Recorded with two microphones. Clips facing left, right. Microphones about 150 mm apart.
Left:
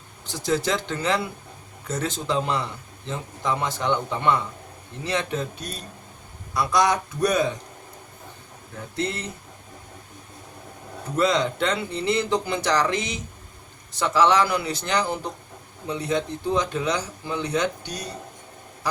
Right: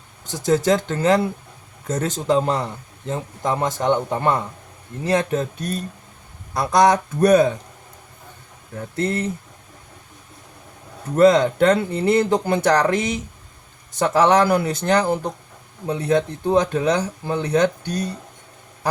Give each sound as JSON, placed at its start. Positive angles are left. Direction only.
{"t": 0.3, "sound": "a man's voice", "side_deg": -45}
{"t": 9.0, "sound": "speech", "side_deg": -50}
{"t": 11.2, "sound": "speech", "side_deg": -45}